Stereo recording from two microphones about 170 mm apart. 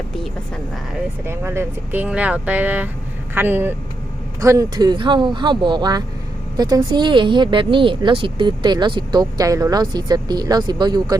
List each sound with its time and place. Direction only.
1.2 s a woman's voice: 15° right (ahead or behind)